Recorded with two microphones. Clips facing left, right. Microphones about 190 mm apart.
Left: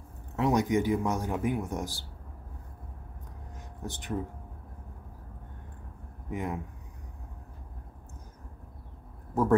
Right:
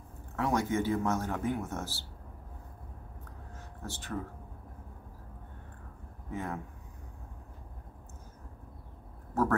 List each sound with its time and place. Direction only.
0.4 s speech: 20° left (ahead or behind)
3.5 s a sound: 15° left (ahead or behind)
6.3 s speech: 15° left (ahead or behind)
9.3 s speech: 15° left (ahead or behind)